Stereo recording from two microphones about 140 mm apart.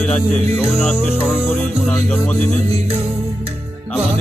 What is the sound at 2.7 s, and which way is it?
Music, 45° right (ahead or behind).